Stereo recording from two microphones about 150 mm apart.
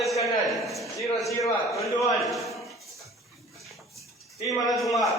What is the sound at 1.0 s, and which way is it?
Speech, 20° left (ahead or behind).